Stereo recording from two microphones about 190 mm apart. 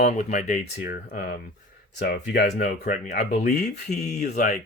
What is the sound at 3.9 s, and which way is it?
Speech, 40° left (ahead or behind).